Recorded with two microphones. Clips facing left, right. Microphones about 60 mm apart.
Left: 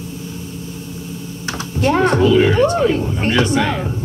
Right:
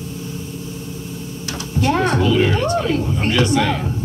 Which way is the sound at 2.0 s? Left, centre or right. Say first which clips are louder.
Left 6 dB; left.